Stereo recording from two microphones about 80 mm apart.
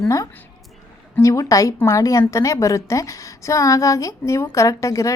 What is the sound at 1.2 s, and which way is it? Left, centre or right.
A woman's voice, left.